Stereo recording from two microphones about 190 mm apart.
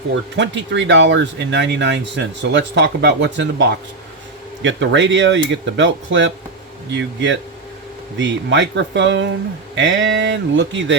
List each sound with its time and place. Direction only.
0.1 s speech: 75° right (ahead or behind)